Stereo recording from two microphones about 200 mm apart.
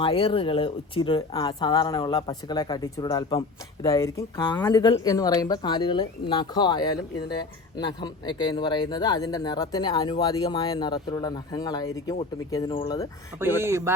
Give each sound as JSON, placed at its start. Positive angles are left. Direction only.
{"t": 0.0, "sound": "speech", "side_deg": 25}
{"t": 13.4, "sound": "speech", "side_deg": -10}